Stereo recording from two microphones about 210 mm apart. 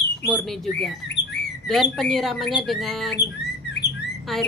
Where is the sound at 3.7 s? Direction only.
55° left (ahead or behind).